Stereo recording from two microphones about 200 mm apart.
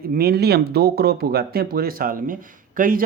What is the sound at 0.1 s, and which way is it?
Speech, 50° right (ahead or behind).